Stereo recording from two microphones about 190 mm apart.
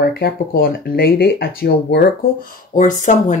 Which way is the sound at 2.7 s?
40° left (ahead or behind).